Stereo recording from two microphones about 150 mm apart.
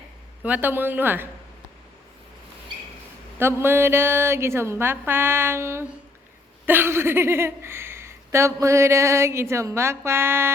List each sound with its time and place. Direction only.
0.4 s speech: 10° right (ahead or behind)
3.3 s speech: 15° right (ahead or behind)